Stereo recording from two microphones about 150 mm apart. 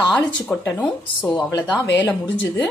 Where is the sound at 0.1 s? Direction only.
10° left (ahead or behind).